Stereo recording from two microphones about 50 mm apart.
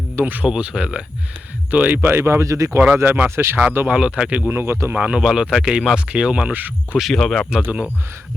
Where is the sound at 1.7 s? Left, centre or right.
Right.